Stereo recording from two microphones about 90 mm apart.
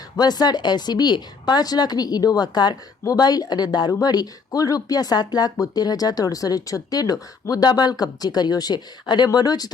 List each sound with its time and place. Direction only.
0.2 s speech: 50° left (ahead or behind)